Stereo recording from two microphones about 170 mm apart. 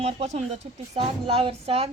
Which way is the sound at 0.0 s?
35° right (ahead or behind).